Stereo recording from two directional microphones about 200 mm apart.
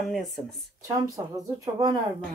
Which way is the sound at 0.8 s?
15° right (ahead or behind).